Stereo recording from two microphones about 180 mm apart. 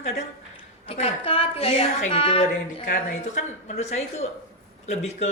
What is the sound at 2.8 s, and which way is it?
Speech, 45° left (ahead or behind).